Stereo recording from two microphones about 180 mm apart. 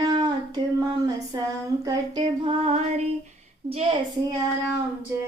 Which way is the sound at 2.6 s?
40° right (ahead or behind).